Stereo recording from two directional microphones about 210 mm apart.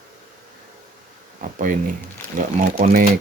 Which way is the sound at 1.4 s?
40° right (ahead or behind).